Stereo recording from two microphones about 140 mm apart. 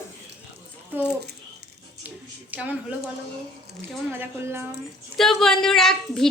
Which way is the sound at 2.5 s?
10° right (ahead or behind).